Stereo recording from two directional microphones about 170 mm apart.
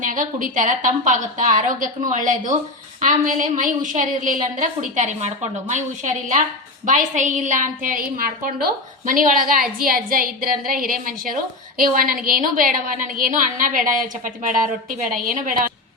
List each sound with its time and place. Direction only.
0.0 s a woman's voice: 50° right (ahead or behind)